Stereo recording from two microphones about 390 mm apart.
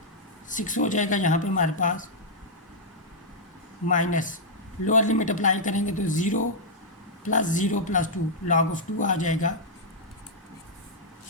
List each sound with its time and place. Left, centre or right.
0.5 s speech: centre
3.8 s speech: centre